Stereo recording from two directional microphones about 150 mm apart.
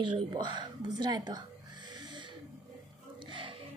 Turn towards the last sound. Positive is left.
turn(degrees=-35)  # may be behind; listen again after turning